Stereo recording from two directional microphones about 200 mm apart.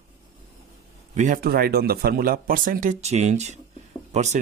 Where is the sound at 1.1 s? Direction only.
40° right (ahead or behind).